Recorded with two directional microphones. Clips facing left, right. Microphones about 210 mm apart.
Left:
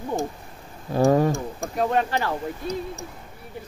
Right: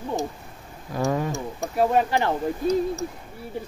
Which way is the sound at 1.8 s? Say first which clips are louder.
Right 2 dB; 10° right (ahead or behind).